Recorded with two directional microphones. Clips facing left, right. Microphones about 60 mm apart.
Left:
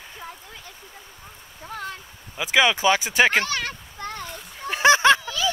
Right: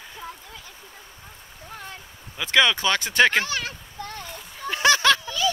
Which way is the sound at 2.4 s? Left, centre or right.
Centre.